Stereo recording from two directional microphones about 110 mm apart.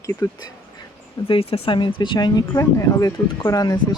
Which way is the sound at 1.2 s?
60° left (ahead or behind).